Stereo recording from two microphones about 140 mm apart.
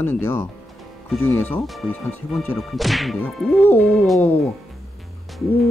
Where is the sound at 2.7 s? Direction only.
Centre (ahead or behind).